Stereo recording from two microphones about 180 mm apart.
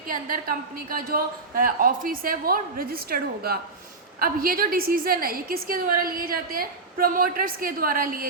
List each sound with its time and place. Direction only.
0.1 s a woman's voice: 50° right (ahead or behind)